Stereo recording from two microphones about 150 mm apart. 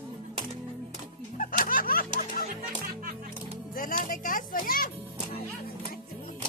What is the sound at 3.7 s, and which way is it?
Music, 65° left (ahead or behind).